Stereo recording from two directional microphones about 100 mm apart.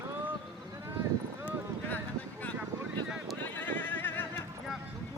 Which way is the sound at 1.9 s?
15° left (ahead or behind).